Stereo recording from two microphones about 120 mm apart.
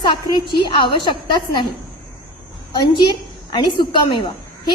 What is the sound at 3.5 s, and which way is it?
Speech, 40° left (ahead or behind).